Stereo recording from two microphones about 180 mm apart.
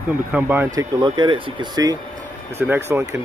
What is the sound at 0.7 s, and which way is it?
Speech, 25° right (ahead or behind).